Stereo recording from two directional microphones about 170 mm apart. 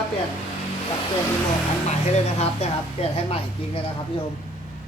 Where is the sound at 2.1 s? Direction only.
40° left (ahead or behind).